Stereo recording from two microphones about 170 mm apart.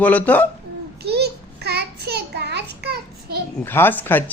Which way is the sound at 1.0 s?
70° right (ahead or behind).